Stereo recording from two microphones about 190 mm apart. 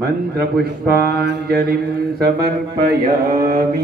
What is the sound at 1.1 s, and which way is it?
A man's voice, 60° right (ahead or behind).